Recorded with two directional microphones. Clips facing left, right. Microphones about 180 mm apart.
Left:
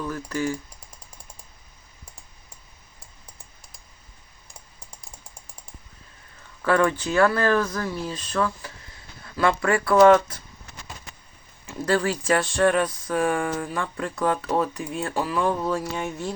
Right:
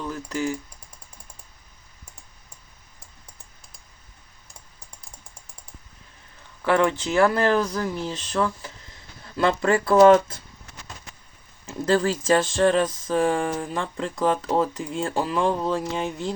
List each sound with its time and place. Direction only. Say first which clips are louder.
0.1 s speech: right 2 dB; 20° right (ahead or behind)
6.6 s speech: even; 20° right (ahead or behind)
12.3 s speech: right 1 dB; 25° right (ahead or behind)